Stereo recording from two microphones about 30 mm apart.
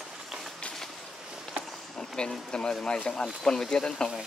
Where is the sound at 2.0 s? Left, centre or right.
Left.